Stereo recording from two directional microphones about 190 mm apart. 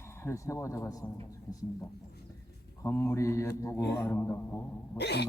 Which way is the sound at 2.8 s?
15° left (ahead or behind).